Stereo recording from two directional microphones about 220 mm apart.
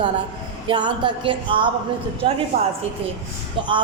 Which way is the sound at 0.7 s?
20° right (ahead or behind).